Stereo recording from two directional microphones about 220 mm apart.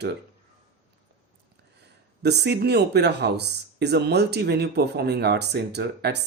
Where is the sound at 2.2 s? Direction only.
50° right (ahead or behind).